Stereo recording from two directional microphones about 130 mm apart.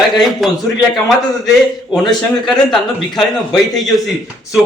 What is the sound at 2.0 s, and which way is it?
Speech, centre (ahead or behind).